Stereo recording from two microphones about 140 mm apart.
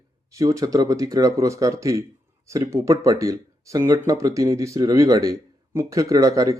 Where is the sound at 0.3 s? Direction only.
25° right (ahead or behind).